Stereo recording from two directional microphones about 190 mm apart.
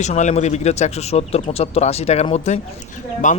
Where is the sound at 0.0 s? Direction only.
40° left (ahead or behind).